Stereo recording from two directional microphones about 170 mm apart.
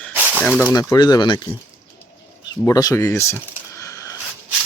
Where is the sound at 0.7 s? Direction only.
20° left (ahead or behind).